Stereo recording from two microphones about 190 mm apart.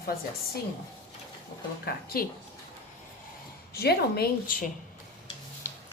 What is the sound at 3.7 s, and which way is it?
Speech, 55° left (ahead or behind).